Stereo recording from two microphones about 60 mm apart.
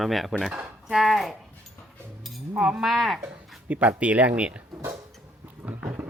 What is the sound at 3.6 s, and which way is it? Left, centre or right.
Speech, right.